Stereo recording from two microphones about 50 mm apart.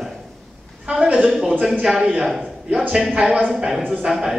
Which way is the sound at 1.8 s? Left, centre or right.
Centre.